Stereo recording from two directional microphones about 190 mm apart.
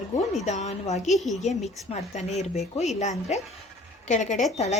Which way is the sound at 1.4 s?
35° left (ahead or behind).